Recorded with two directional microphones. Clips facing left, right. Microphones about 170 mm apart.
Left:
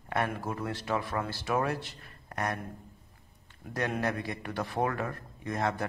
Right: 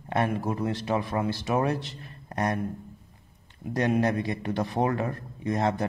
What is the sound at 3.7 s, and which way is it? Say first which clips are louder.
A man's voice: right 7 dB; 25° right (ahead or behind).